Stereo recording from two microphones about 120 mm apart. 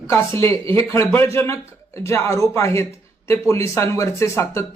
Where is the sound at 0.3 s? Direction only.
25° left (ahead or behind).